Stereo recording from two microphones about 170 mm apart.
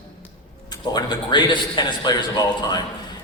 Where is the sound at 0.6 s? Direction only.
25° left (ahead or behind).